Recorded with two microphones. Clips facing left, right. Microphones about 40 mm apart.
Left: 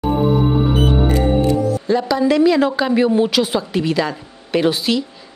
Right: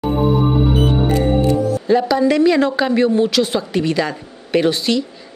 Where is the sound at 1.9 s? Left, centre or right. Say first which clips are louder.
Right 3 dB; centre.